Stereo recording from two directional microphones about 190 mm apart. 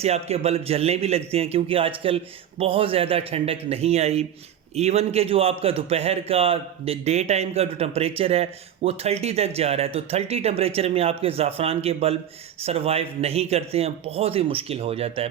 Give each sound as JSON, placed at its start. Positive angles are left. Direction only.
{"t": 0.0, "sound": "a man's voice", "side_deg": -35}